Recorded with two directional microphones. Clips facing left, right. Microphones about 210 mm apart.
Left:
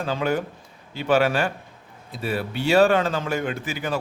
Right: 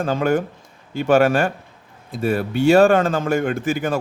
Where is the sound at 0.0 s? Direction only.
50° right (ahead or behind).